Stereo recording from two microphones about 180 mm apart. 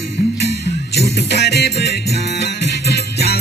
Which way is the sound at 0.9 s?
70° left (ahead or behind).